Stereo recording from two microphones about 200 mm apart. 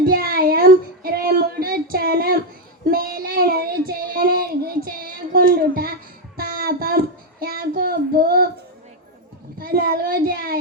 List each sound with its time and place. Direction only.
0.0 s child singing: 45° right (ahead or behind)
9.6 s child singing: 45° right (ahead or behind)